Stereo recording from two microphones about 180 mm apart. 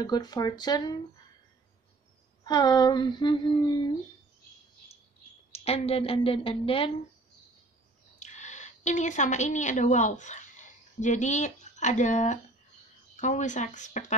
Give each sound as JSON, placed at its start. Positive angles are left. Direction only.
{"t": 0.0, "sound": "speech", "side_deg": 20}
{"t": 2.4, "sound": "speech", "side_deg": 20}
{"t": 5.5, "sound": "speech", "side_deg": 35}
{"t": 8.2, "sound": "a woman's voice", "side_deg": 40}